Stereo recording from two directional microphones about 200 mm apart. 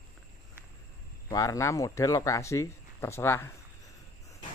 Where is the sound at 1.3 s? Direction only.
15° left (ahead or behind).